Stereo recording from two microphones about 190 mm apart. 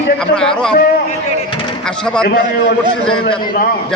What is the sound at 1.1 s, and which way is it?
Vehicle, 30° left (ahead or behind).